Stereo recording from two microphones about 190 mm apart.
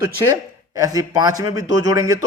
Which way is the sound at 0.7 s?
20° right (ahead or behind).